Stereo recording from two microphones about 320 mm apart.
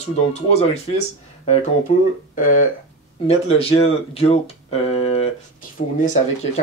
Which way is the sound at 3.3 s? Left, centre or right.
Centre.